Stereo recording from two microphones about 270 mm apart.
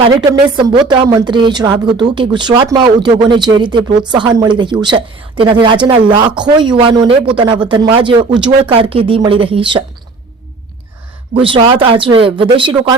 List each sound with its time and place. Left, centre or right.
0.2 s speech: centre
11.3 s speech: centre